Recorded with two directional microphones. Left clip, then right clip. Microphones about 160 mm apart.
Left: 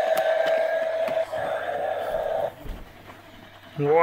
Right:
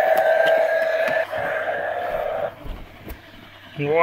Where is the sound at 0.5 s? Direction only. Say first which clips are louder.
Right 5 dB; 60° right (ahead or behind).